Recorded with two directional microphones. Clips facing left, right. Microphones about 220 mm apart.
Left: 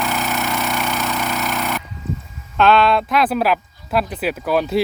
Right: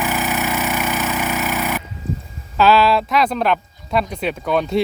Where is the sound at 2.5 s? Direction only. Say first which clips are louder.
Even; 5° right (ahead or behind).